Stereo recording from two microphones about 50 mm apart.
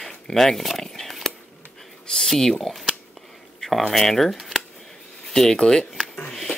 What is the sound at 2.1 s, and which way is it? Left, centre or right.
Speech, centre.